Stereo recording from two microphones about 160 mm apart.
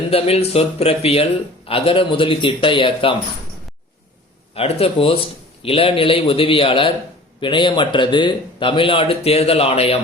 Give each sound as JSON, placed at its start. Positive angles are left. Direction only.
{"t": 0.1, "sound": "speech", "side_deg": 40}
{"t": 4.5, "sound": "speech", "side_deg": 40}